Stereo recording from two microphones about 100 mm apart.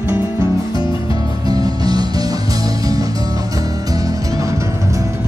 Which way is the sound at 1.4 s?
40° right (ahead or behind).